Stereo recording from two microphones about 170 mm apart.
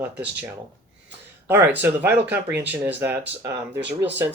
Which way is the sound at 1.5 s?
15° right (ahead or behind).